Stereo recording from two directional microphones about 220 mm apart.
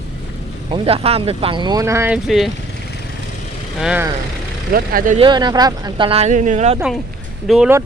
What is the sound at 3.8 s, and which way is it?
Speech, 5° right (ahead or behind).